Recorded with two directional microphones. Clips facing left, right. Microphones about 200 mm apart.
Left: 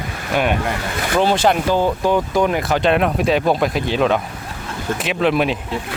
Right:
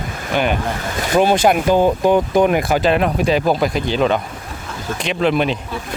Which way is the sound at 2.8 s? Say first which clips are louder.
Even; centre (ahead or behind).